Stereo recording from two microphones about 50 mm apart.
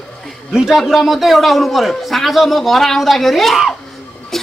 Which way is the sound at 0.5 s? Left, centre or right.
Centre.